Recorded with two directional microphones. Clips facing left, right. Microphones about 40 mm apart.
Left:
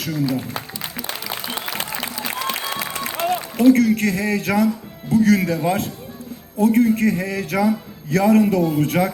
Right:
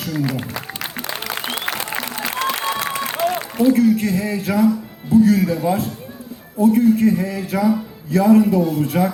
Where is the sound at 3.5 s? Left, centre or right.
Left.